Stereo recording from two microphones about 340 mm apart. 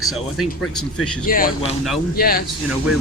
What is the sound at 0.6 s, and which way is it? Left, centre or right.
Speech, left.